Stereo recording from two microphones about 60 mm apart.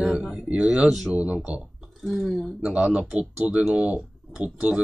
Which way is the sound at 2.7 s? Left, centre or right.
Centre.